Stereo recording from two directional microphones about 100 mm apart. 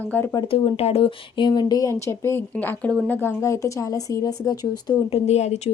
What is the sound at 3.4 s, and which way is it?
Speech, 30° left (ahead or behind).